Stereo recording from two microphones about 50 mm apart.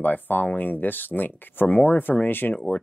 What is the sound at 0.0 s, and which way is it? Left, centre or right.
Speech, left.